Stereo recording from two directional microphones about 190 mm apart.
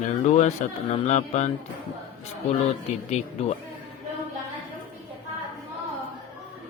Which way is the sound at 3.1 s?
35° left (ahead or behind).